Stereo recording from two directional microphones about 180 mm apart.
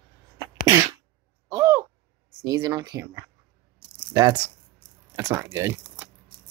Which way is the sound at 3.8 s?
25° right (ahead or behind).